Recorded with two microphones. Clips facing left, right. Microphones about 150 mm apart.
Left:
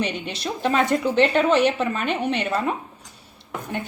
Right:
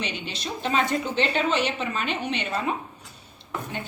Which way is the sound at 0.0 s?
65° left (ahead or behind).